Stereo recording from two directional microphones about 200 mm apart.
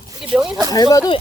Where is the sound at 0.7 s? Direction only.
15° left (ahead or behind).